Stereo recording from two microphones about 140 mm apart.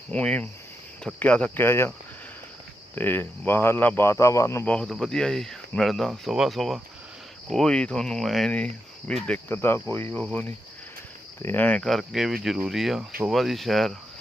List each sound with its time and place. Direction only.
0.1 s speech: 10° left (ahead or behind)
1.6 s speech: 20° left (ahead or behind)
2.9 s speech: 15° left (ahead or behind)
4.6 s speech: 5° left (ahead or behind)
11.4 s speech: 10° left (ahead or behind)